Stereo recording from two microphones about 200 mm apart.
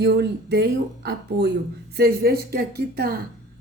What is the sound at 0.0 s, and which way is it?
Speech, 55° right (ahead or behind).